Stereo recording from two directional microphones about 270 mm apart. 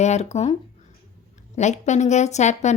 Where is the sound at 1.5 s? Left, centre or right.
Left.